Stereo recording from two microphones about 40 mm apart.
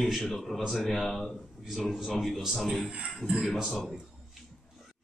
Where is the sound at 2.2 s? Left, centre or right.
Centre.